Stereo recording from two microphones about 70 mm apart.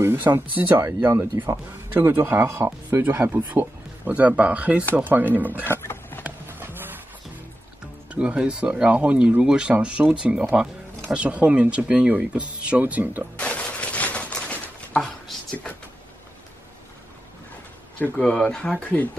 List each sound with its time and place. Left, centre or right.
0.0 s speech: right
1.9 s speech: right
2.9 s speech: right
4.0 s speech: right
5.6 s a sound: left
6.2 s clip-clop: right
7.8 s speech: centre
13.4 s a sound: centre
15.0 s a sound: centre
17.9 s speech: left
18.3 s speech: centre